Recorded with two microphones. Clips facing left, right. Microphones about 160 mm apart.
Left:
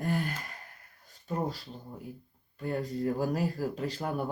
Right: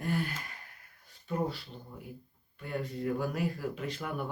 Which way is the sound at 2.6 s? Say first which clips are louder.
Left 4 dB; 35° left (ahead or behind).